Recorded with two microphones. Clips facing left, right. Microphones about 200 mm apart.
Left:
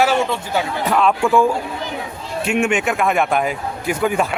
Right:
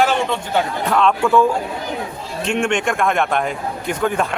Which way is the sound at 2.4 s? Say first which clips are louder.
Left 1 dB; 5° left (ahead or behind).